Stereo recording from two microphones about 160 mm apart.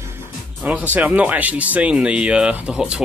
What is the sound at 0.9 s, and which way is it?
Speech, 10° right (ahead or behind).